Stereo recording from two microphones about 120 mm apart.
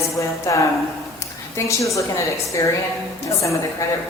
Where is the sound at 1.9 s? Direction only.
25° left (ahead or behind).